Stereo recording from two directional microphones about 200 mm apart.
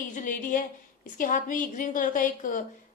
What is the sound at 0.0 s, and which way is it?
A woman's voice, 40° left (ahead or behind).